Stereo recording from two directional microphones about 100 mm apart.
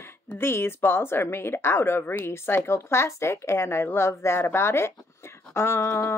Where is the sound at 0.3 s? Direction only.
20° left (ahead or behind).